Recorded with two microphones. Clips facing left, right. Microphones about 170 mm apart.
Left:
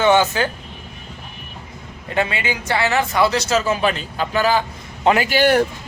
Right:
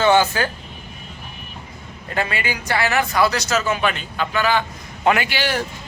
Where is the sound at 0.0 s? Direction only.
20° left (ahead or behind).